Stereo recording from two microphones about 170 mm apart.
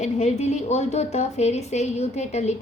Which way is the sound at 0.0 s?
40° left (ahead or behind).